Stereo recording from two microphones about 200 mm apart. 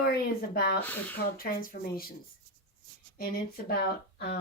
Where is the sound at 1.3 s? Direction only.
45° left (ahead or behind).